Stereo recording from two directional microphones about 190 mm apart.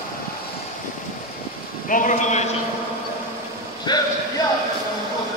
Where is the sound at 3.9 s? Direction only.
20° left (ahead or behind).